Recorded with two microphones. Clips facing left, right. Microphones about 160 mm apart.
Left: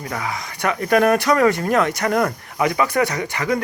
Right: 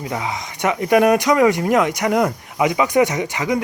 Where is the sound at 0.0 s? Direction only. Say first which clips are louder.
Right 2 dB; 20° right (ahead or behind).